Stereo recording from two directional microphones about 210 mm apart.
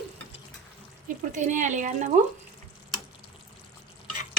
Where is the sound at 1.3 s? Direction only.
35° right (ahead or behind).